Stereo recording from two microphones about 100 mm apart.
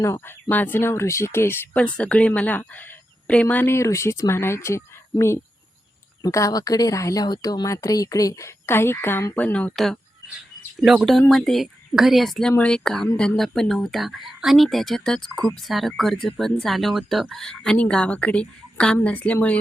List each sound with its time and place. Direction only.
0.0 s speech: 30° left (ahead or behind)
1.7 s a woman's voice: 10° left (ahead or behind)
9.7 s a woman's voice: 5° left (ahead or behind)